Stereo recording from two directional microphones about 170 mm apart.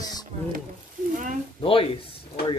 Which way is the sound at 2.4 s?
70° left (ahead or behind).